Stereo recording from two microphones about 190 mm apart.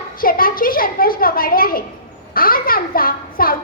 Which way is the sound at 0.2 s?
50° left (ahead or behind).